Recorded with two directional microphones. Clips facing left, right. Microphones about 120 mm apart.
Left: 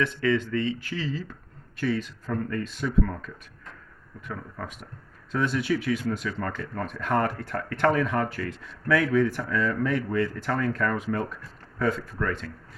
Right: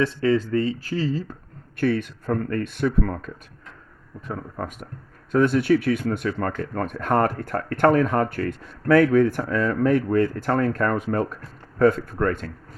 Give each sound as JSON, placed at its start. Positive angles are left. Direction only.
{"t": 0.0, "sound": "speech", "side_deg": -30}
{"t": 1.7, "sound": "speech", "side_deg": -55}